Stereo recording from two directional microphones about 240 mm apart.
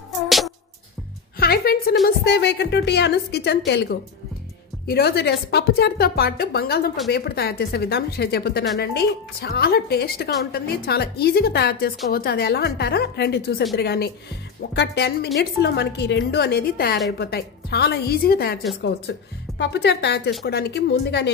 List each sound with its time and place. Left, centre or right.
1.4 s a woman's voice: left